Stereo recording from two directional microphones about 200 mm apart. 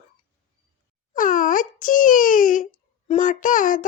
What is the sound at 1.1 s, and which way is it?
Wail, 40° left (ahead or behind).